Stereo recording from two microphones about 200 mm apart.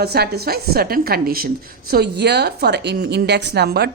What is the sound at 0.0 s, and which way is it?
A woman's voice, 55° right (ahead or behind).